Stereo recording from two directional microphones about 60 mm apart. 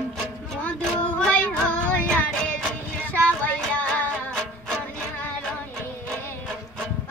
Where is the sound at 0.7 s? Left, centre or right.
Left.